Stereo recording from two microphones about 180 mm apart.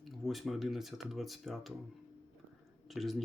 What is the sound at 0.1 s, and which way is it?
Speech, centre (ahead or behind).